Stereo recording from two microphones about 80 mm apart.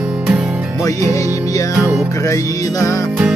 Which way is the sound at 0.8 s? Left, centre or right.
Left.